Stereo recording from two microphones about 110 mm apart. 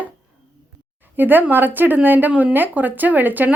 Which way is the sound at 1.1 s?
15° right (ahead or behind).